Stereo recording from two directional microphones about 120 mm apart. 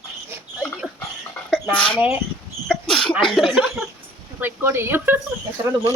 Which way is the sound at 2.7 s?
5° left (ahead or behind).